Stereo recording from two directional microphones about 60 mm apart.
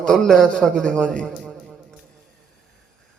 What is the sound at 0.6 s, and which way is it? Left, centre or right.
Speech, centre.